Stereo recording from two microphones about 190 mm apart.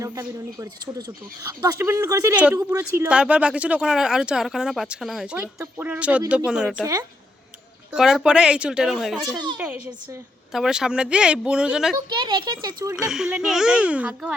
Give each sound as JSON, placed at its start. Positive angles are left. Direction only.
{"t": 0.0, "sound": "speech", "side_deg": -20}
{"t": 7.9, "sound": "speech", "side_deg": 0}
{"t": 10.5, "sound": "speech", "side_deg": 0}
{"t": 11.9, "sound": "speech", "side_deg": -25}
{"t": 13.0, "sound": "speech", "side_deg": -5}